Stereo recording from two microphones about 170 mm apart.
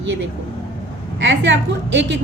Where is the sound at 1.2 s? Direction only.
90° right.